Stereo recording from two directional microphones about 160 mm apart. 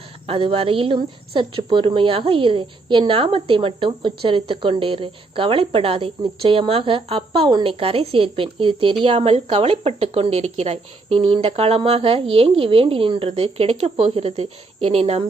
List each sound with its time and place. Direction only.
0.3 s a woman's voice: 35° right (ahead or behind)